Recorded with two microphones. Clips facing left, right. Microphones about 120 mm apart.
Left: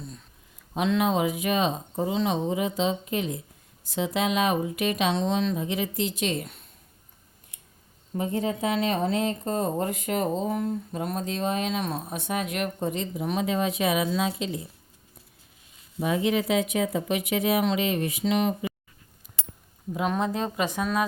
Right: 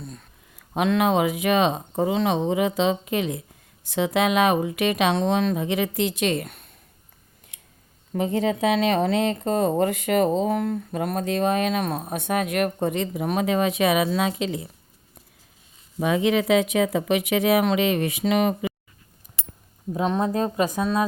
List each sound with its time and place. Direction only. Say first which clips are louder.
0.7 s speech: right 3 dB; 65° right (ahead or behind)
7.5 s scissors: right 2 dB; 90° right
8.1 s speech: right 4 dB; 90° right
16.0 s speech: right 4 dB; 90° right; by 18.7 s 65° right (ahead or behind)
20.0 s a woman's voice: right 3 dB; 30° right (ahead or behind)
20.3 s a woman's voice: right 5 dB; 40° right (ahead or behind)